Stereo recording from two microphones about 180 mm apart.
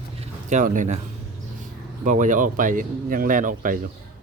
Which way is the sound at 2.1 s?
45° right (ahead or behind).